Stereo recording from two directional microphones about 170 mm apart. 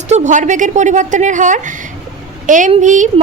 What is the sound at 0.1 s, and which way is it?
A woman's voice, 45° right (ahead or behind).